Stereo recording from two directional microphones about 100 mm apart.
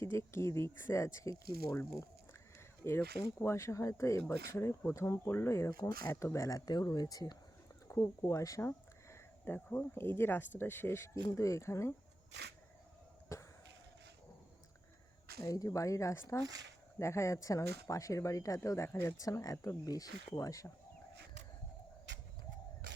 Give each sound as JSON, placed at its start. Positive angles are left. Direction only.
{"t": 0.0, "sound": "speech", "side_deg": 30}
{"t": 6.9, "sound": "speech", "side_deg": 40}
{"t": 7.9, "sound": "speech", "side_deg": 30}
{"t": 13.3, "sound": "a sound", "side_deg": 30}
{"t": 15.4, "sound": "speech", "side_deg": 35}
{"t": 18.9, "sound": "speech", "side_deg": 20}
{"t": 19.2, "sound": "speech", "side_deg": 35}